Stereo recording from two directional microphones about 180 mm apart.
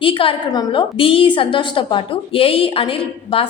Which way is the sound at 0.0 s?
30° left (ahead or behind).